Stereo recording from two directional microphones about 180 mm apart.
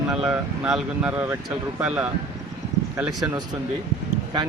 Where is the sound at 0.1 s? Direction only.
5° right (ahead or behind).